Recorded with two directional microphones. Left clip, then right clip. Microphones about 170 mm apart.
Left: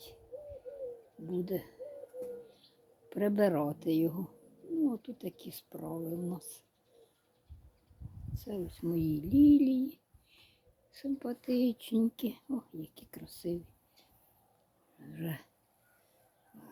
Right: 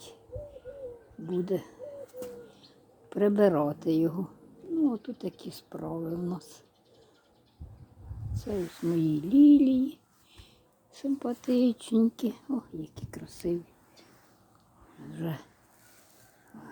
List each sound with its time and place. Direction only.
1.3 s speech: 5° right (ahead or behind)
3.1 s speech: centre (ahead or behind)
8.3 s a sound: 10° right (ahead or behind)
9.0 s speech: 10° right (ahead or behind)
15.1 s speech: 10° right (ahead or behind)